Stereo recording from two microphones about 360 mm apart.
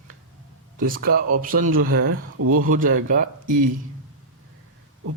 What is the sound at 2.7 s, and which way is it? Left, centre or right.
Speech, right.